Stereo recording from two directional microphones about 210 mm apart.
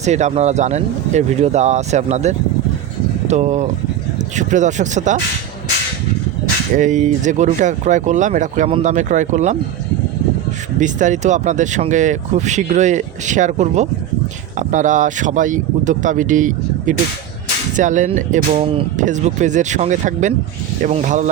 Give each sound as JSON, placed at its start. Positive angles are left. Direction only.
{"t": 0.0, "sound": "speech", "side_deg": -35}
{"t": 6.7, "sound": "speech", "side_deg": -35}
{"t": 10.8, "sound": "speech", "side_deg": -35}